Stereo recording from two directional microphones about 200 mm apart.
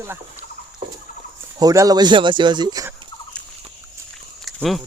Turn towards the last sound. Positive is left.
turn(degrees=0)  # may be behind; listen again after turning